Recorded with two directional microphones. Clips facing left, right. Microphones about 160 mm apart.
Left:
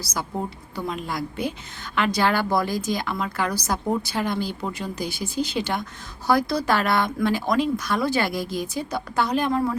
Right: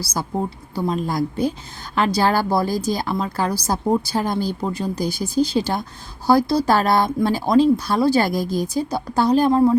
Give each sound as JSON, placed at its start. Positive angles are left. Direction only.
{"t": 0.0, "sound": "a woman's voice", "side_deg": -30}